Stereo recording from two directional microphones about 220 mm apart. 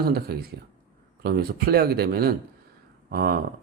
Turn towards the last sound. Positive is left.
turn(degrees=-45)  # may be behind; listen again after turning